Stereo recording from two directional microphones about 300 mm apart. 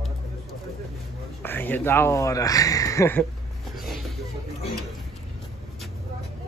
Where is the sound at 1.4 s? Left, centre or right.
Centre.